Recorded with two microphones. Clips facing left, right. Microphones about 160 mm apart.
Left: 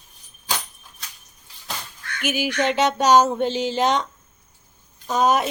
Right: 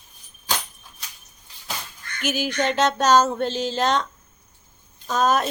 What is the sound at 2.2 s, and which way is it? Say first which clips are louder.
Speech: left 1 dB; 10° left (ahead or behind).